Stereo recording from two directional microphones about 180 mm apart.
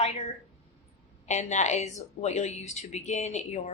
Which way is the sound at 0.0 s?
35° left (ahead or behind).